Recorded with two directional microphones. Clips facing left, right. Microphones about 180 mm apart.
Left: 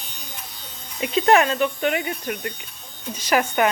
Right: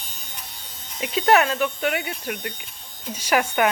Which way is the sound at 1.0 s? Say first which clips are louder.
Left 1 dB; 5° right (ahead or behind).